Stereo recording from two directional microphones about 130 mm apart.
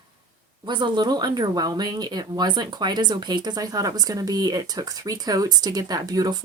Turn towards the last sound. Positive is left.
turn(degrees=-30)  # may be behind; listen again after turning